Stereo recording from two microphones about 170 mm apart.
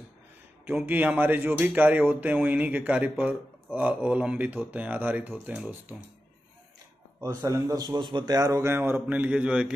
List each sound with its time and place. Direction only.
0.7 s a man's voice: 10° right (ahead or behind)
7.2 s a man's voice: 15° right (ahead or behind)